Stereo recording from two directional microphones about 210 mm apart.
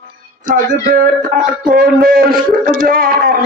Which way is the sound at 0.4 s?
40° right (ahead or behind).